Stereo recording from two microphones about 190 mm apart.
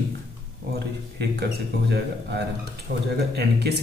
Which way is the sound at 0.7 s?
60° right (ahead or behind).